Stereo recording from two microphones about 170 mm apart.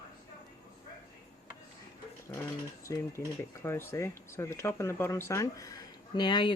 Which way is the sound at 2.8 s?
15° left (ahead or behind).